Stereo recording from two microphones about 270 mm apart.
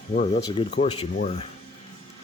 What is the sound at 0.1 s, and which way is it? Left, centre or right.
Speech, left.